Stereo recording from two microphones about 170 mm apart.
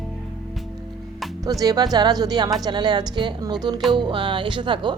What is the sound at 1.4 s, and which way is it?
Speech, 20° right (ahead or behind).